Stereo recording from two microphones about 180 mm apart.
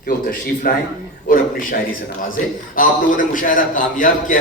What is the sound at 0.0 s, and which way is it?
A man's voice, 50° left (ahead or behind).